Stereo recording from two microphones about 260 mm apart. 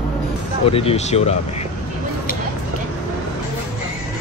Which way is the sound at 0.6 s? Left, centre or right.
Left.